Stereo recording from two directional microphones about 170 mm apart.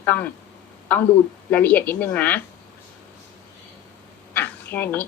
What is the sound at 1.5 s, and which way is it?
Speech, 10° left (ahead or behind).